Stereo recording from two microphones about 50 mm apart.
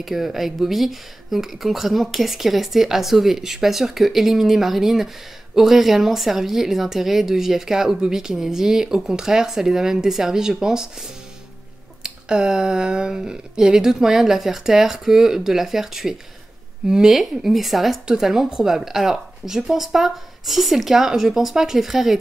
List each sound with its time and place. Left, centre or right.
0.0 s a woman's voice: centre
17.1 s speech: centre
18.0 s speech: centre